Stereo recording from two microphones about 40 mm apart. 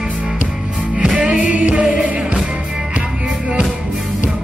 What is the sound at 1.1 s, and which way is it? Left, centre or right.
Music, right.